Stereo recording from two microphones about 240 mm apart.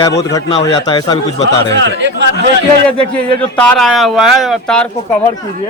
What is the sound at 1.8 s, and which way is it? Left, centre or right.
Speech, right.